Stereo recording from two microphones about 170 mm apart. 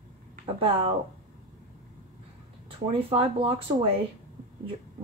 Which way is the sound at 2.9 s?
35° right (ahead or behind).